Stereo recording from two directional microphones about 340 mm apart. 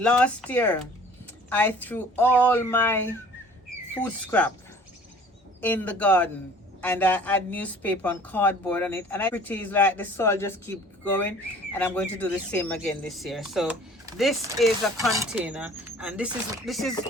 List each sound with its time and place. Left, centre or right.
0.0 s speech: centre
5.5 s speech: centre